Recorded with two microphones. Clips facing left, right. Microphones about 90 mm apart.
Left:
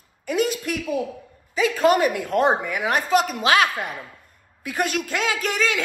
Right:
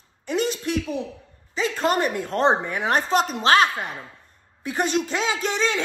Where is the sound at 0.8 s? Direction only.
45° left (ahead or behind).